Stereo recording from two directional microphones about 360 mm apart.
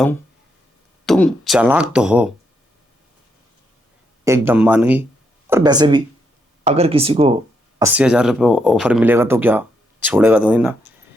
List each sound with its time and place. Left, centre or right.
1.0 s speech: centre
4.2 s speech: centre
7.8 s speech: centre